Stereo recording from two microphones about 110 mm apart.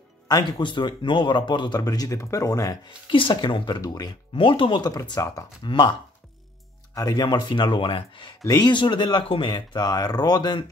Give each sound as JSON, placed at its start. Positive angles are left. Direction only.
{"t": 0.3, "sound": "speech", "side_deg": 40}
{"t": 3.1, "sound": "speech", "side_deg": 50}
{"t": 4.4, "sound": "speech", "side_deg": 50}
{"t": 7.0, "sound": "speech", "side_deg": 35}
{"t": 8.5, "sound": "speech", "side_deg": 40}